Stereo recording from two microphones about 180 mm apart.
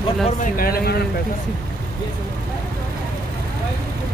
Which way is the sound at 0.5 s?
55° left (ahead or behind).